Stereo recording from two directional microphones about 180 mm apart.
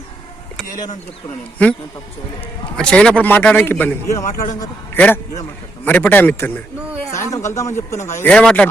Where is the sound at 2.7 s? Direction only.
5° left (ahead or behind).